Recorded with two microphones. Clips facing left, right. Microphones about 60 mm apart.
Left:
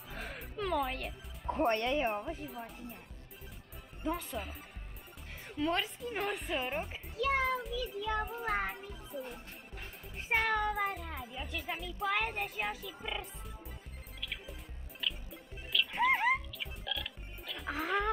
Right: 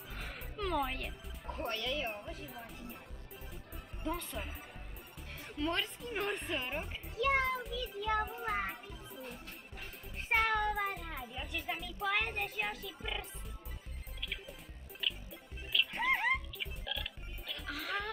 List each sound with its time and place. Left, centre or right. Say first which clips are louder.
0.1 s music: left 4 dB; centre
1.7 s speech: left 5 dB; left
2.0 s music: left 7 dB; centre
4.0 s music: left 3 dB; centre
15.7 s frog: left 3 dB; centre
17.6 s music: left 6 dB; centre